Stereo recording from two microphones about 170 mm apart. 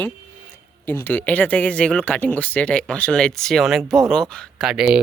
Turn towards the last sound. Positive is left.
turn(degrees=-5)  # may be behind; listen again after turning